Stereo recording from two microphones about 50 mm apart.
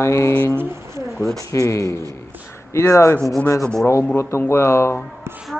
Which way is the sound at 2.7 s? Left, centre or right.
Left.